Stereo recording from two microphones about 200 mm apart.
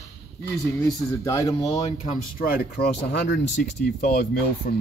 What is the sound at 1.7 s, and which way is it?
Speech, 30° left (ahead or behind).